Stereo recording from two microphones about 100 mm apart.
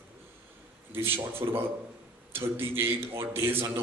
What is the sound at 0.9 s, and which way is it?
A man's voice, 25° right (ahead or behind).